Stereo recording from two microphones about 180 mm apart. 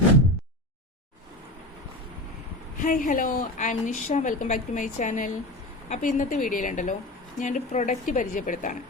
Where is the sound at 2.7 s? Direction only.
50° left (ahead or behind).